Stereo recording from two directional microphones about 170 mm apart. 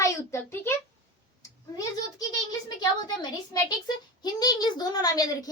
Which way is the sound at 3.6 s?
25° left (ahead or behind).